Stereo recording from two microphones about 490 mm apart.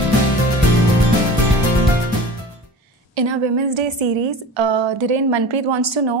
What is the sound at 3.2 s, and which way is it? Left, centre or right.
A woman's voice, right.